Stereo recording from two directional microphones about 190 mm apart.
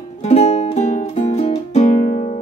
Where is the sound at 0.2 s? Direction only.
35° left (ahead or behind).